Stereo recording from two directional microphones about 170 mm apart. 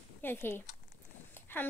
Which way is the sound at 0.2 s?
15° left (ahead or behind).